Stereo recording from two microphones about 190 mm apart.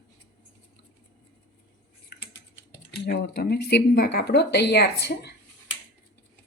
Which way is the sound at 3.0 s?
60° left (ahead or behind).